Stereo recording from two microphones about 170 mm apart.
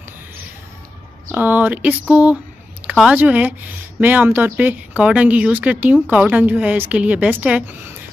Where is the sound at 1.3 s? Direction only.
10° right (ahead or behind).